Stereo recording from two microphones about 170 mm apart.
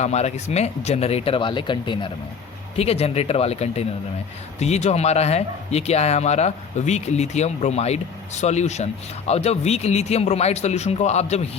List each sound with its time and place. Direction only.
0.0 s speech: 40° left (ahead or behind)